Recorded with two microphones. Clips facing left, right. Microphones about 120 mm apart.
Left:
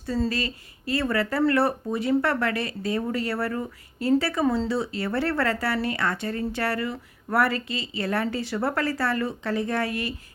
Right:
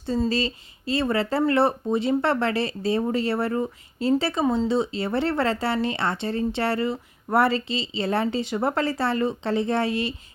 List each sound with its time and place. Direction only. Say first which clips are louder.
0.3 s speech: right 4 dB; 25° right (ahead or behind)